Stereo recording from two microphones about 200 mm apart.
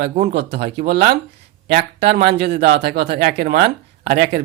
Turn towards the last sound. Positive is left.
turn(degrees=-55)  # may be behind; listen again after turning